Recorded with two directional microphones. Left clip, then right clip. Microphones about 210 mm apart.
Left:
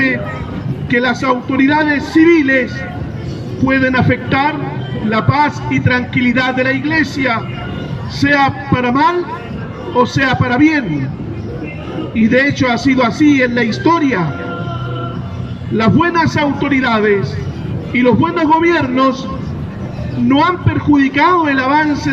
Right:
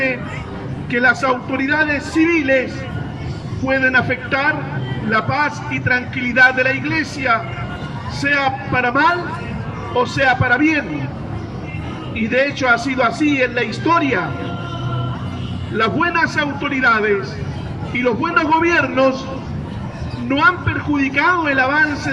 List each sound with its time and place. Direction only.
0.9 s a man's voice: 25° left (ahead or behind)
3.7 s a man's voice: 25° left (ahead or behind)
12.1 s a man's voice: 25° left (ahead or behind)
15.8 s a man's voice: 25° left (ahead or behind)
20.2 s a man's voice: 25° left (ahead or behind)